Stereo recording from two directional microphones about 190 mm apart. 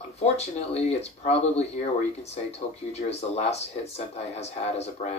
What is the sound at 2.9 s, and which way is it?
Speech, 35° left (ahead or behind).